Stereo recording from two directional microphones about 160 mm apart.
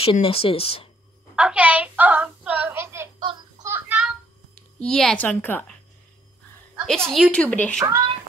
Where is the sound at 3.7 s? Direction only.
10° right (ahead or behind).